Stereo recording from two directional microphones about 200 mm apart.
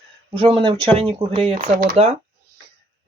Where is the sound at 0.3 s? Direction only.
30° right (ahead or behind).